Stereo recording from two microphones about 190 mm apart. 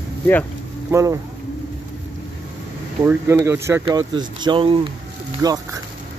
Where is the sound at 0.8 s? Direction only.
15° right (ahead or behind).